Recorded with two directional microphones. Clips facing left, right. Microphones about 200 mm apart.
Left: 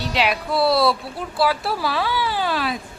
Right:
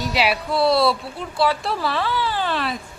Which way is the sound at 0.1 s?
5° right (ahead or behind).